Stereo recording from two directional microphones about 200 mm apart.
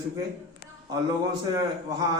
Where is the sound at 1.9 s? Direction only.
20° right (ahead or behind).